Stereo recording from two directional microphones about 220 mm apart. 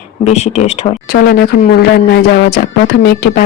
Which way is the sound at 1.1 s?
45° left (ahead or behind).